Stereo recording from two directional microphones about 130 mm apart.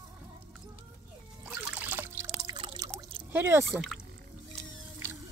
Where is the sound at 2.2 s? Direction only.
35° right (ahead or behind).